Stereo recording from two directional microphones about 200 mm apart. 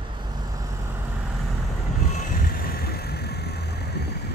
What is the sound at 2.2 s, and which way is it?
Vehicle, 45° left (ahead or behind).